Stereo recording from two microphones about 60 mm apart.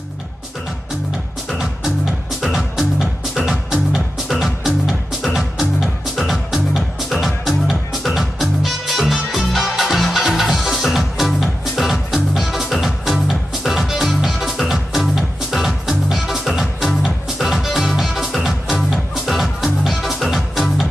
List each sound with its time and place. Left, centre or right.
2.4 s music: centre